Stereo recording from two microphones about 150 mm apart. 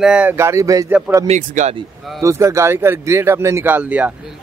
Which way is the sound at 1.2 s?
50° right (ahead or behind).